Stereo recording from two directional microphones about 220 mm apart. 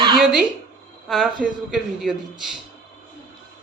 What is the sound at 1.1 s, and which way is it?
A woman's voice, centre (ahead or behind).